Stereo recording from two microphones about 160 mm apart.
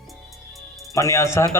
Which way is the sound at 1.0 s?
20° left (ahead or behind).